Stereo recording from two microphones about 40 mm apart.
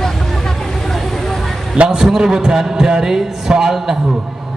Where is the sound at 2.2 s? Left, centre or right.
Centre.